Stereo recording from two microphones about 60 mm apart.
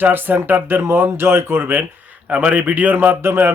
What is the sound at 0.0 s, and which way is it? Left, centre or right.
Speech, right.